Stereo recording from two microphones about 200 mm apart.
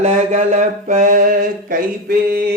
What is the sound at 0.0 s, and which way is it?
Mantra, 35° right (ahead or behind).